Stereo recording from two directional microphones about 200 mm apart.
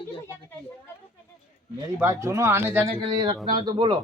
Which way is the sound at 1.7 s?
15° right (ahead or behind).